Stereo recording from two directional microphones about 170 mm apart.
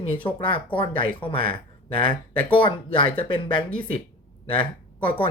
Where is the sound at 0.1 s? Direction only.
30° left (ahead or behind).